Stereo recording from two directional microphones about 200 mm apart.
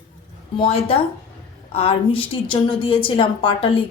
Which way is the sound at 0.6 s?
30° left (ahead or behind).